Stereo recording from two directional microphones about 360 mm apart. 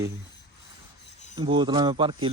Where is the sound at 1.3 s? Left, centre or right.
Centre.